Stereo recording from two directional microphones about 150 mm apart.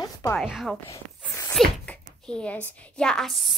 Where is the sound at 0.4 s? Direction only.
Centre (ahead or behind).